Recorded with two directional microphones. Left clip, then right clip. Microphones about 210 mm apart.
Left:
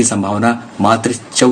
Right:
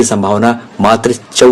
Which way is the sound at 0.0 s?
35° right (ahead or behind).